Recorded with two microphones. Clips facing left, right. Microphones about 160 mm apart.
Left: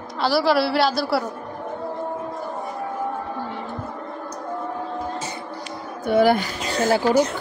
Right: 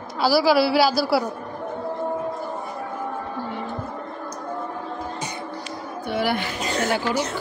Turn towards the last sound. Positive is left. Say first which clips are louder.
# left 4 dB
turn(degrees=40)  # may be behind; listen again after turning